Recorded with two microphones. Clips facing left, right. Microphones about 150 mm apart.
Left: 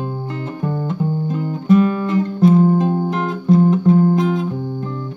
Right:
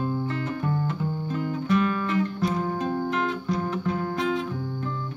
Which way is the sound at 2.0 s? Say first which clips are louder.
Left 9 dB; 35° left (ahead or behind).